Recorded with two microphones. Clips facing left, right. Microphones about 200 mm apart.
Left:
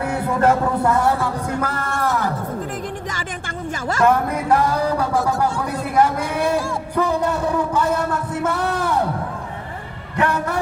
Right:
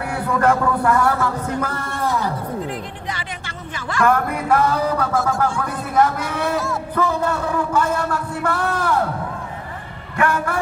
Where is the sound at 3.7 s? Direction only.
40° left (ahead or behind).